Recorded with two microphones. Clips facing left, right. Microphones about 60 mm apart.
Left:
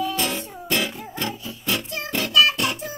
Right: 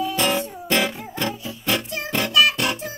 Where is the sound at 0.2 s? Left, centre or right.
Right.